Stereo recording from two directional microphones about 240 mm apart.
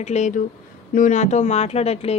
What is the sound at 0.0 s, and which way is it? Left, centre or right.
A woman's voice, left.